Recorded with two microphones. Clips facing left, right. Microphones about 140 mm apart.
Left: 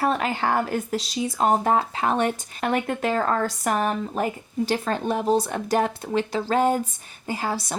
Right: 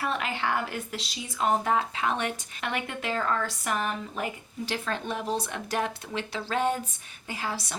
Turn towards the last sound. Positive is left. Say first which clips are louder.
# left 6 dB
turn(degrees=40)  # may be behind; listen again after turning